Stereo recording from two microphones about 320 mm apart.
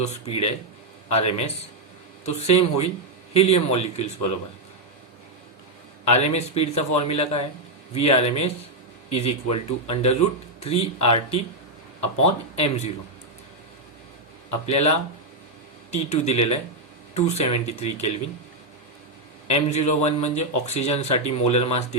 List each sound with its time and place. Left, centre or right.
0.0 s speech: centre
6.1 s speech: centre
14.7 s speech: centre
19.5 s speech: centre